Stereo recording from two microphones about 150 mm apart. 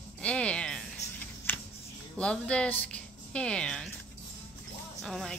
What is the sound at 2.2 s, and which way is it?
A woman's voice, 5° left (ahead or behind).